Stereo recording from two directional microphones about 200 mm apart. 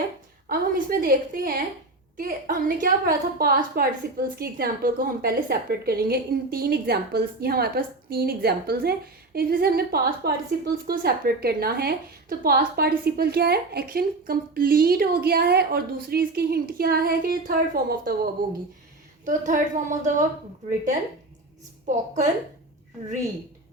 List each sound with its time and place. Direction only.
0.4 s a woman's voice: 45° right (ahead or behind)
19.2 s a woman's voice: 40° right (ahead or behind)
21.8 s a woman's voice: 35° right (ahead or behind)